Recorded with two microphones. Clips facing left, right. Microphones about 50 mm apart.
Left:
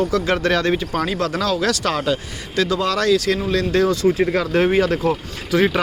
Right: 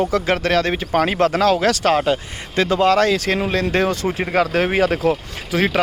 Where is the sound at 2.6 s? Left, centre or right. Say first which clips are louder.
Right 2 dB; right.